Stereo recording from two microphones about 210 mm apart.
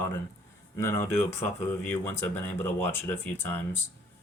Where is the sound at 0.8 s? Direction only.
10° left (ahead or behind).